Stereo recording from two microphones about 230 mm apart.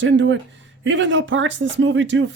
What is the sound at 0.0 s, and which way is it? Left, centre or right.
Speech, right.